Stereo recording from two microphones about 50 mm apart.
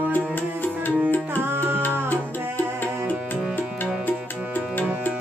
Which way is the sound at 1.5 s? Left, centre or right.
Right.